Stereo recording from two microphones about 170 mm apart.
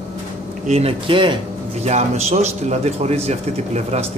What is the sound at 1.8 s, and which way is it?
A man's voice, 40° right (ahead or behind).